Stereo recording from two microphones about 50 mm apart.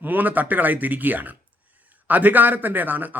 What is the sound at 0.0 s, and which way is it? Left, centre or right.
A man's voice, right.